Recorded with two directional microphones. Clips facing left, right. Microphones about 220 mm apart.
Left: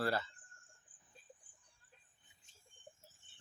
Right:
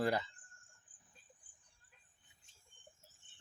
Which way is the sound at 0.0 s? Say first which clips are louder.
Right 2 dB; 15° right (ahead or behind).